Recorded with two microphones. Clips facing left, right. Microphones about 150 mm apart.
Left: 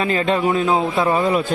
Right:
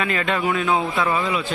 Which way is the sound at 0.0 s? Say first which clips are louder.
Left 4 dB; 30° left (ahead or behind).